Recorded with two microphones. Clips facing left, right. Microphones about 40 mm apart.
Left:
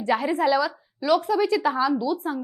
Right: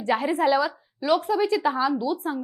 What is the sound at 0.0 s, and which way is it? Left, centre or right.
A woman's voice, centre.